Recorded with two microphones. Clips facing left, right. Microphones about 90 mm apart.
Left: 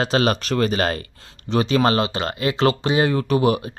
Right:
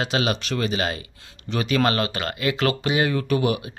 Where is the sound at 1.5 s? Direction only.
30° left (ahead or behind).